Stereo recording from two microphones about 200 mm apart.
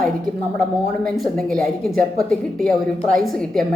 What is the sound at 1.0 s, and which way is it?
A woman's voice, 5° left (ahead or behind).